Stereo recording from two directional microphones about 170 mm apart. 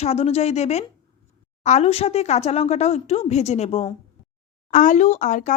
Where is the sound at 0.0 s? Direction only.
40° left (ahead or behind).